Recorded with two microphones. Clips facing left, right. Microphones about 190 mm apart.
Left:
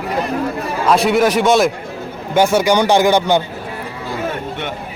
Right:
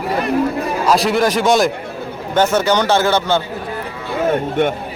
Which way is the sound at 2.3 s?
10° left (ahead or behind).